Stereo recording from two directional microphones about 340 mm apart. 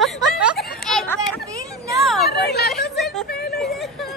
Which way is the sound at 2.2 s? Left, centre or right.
Left.